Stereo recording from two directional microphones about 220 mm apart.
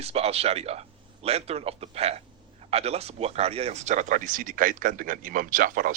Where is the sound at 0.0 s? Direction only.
25° right (ahead or behind).